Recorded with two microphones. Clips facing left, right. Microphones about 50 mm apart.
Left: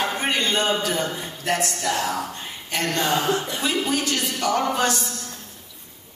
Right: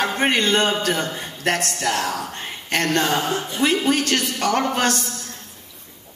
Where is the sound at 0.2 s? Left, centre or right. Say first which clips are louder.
Right 7 dB; right.